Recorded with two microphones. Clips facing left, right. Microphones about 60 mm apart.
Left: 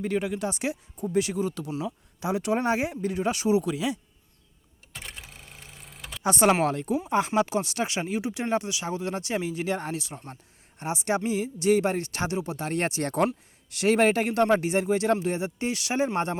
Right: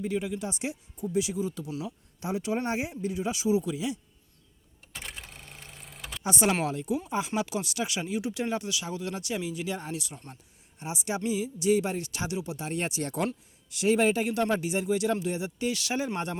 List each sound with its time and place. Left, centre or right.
0.0 s speech: left
0.9 s speech: left
4.9 s a sound: centre
6.2 s speech: left
8.2 s speech: left
10.0 s speech: left
10.8 s speech: left
12.6 s speech: left